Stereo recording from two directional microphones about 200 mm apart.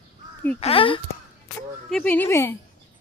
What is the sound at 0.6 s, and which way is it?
Speech, 30° left (ahead or behind).